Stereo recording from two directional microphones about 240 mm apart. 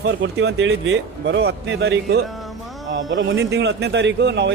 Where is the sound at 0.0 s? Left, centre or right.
Right.